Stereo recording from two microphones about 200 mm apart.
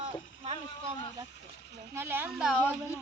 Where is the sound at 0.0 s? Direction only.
30° right (ahead or behind).